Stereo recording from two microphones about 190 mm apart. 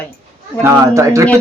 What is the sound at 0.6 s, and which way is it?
Speech, 15° right (ahead or behind).